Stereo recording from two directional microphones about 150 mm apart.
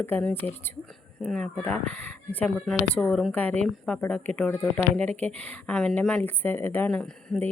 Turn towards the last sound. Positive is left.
turn(degrees=5)  # may be behind; listen again after turning